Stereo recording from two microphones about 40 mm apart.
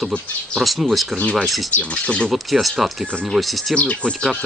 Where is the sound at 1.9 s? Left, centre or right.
Left.